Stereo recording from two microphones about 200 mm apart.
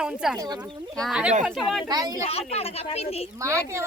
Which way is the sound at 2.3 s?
30° left (ahead or behind).